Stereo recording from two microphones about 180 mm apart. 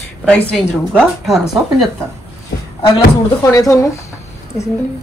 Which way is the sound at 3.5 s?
20° left (ahead or behind).